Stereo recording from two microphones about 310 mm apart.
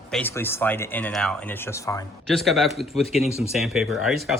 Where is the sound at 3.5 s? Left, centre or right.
Centre.